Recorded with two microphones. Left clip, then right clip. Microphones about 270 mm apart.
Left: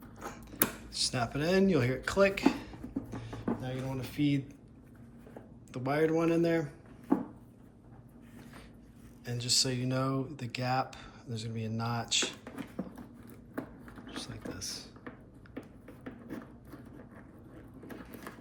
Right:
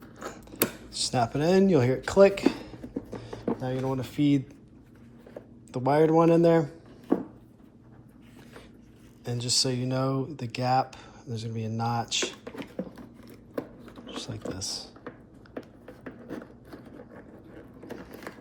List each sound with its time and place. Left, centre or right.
0.3 s a sound: centre
0.9 s speech: centre
5.7 s speech: centre
9.2 s speech: centre
14.1 s speech: centre